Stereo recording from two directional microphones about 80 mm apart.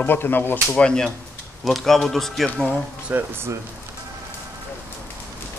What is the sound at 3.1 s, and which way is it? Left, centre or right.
Speech, right.